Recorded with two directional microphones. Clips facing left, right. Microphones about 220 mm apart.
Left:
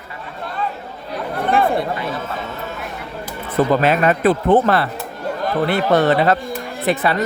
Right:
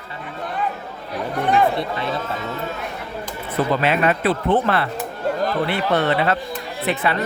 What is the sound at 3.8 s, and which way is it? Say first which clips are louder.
A man's voice: left 4 dB; 40° left (ahead or behind).